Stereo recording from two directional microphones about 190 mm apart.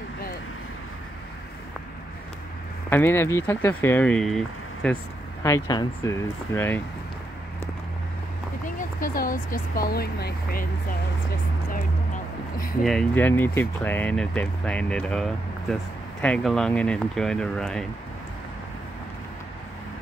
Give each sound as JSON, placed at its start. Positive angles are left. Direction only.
{"t": 2.9, "sound": "speech", "side_deg": 10}
{"t": 5.4, "sound": "speech", "side_deg": 20}
{"t": 8.6, "sound": "speech", "side_deg": 45}
{"t": 12.8, "sound": "speech", "side_deg": 5}